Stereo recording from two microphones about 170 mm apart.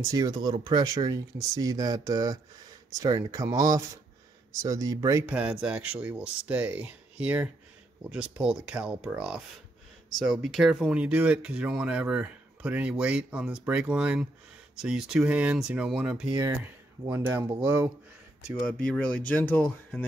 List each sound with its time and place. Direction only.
0.0 s speech: 20° right (ahead or behind)
5.3 s speech: 10° right (ahead or behind)
16.3 s speech: 20° right (ahead or behind)
18.7 s speech: 5° left (ahead or behind)